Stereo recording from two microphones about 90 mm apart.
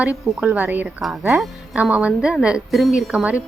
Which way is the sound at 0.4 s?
15° right (ahead or behind).